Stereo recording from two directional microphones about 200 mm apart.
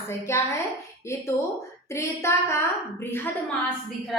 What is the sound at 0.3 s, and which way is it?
Speech, 15° left (ahead or behind).